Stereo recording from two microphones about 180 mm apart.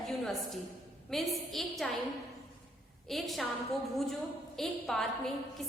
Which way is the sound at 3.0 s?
Centre (ahead or behind).